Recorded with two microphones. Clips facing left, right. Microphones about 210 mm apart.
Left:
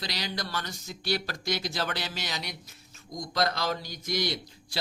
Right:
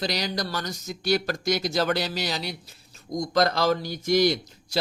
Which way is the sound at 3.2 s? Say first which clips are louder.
Right 7 dB; 45° right (ahead or behind).